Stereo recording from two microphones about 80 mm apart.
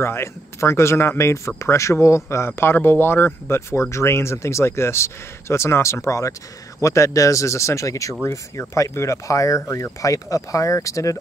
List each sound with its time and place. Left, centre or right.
0.0 s speech: left